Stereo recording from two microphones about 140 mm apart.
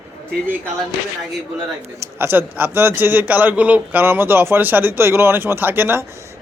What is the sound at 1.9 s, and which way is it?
A man's voice, 15° right (ahead or behind).